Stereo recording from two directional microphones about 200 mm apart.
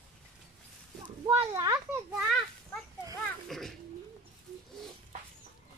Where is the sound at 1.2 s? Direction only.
15° right (ahead or behind).